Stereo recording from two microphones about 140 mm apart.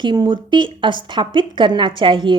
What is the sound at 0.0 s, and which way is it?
A woman's voice, 35° right (ahead or behind).